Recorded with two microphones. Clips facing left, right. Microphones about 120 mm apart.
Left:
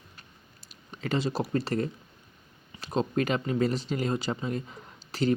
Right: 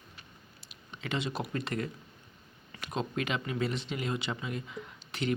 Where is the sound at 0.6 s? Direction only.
40° left (ahead or behind).